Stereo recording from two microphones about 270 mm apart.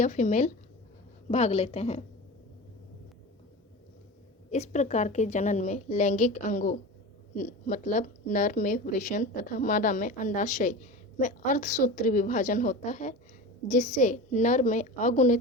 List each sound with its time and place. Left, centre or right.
0.0 s a woman's voice: left
4.5 s a woman's voice: left